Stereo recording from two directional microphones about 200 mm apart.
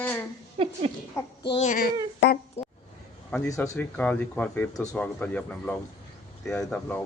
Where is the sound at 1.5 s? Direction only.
35° left (ahead or behind).